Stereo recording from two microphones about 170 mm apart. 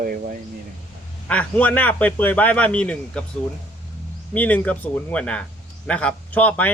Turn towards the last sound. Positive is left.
turn(degrees=10)  # may be behind; listen again after turning